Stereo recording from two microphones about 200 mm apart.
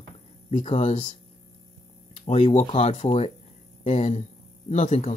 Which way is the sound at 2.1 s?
35° left (ahead or behind).